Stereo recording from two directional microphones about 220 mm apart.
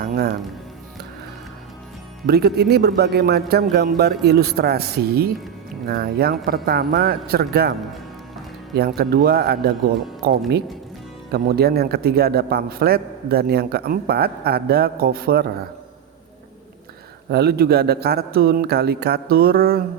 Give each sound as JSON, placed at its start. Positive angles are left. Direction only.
{"t": 0.0, "sound": "speech", "side_deg": -40}
{"t": 2.2, "sound": "a man's voice", "side_deg": -45}
{"t": 9.0, "sound": "a man's voice", "side_deg": -45}
{"t": 17.2, "sound": "a man's voice", "side_deg": -45}